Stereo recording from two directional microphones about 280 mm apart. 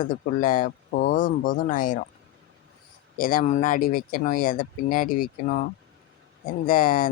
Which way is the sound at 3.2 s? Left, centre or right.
Left.